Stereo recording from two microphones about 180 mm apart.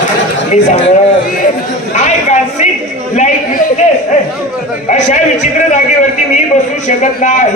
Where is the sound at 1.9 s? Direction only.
40° left (ahead or behind).